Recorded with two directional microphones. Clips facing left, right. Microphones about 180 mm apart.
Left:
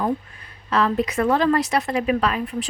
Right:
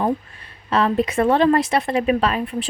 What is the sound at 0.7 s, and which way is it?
A woman's voice, 25° right (ahead or behind).